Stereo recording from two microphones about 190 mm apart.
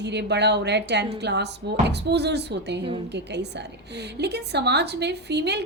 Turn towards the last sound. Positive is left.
turn(degrees=-60)  # may be behind; listen again after turning